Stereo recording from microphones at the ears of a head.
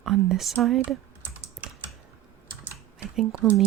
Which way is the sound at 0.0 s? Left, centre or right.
Right.